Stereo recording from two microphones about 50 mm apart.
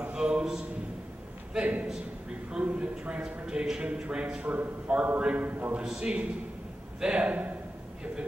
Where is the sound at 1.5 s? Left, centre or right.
Right.